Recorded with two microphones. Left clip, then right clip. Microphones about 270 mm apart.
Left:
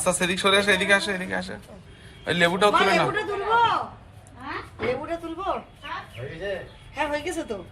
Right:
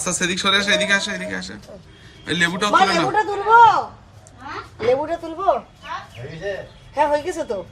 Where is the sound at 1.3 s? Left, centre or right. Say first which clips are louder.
Right 1 dB; centre.